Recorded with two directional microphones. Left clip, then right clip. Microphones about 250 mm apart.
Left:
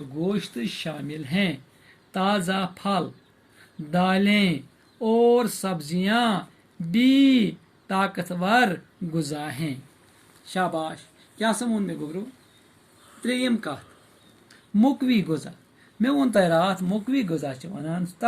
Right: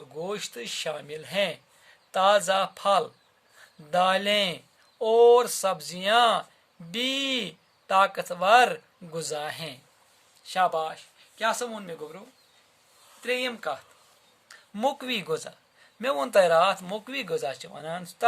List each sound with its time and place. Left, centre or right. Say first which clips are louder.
0.3 s speech: left 4 dB; right
13.2 s speech: left 2 dB; right
14.8 s speech: left 4 dB; right